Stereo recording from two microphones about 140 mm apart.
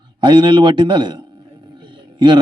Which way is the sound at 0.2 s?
35° right (ahead or behind).